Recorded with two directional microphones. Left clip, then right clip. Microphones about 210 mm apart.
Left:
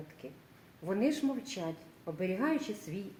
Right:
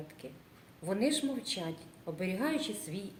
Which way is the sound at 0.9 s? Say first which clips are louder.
Even; 40° left (ahead or behind).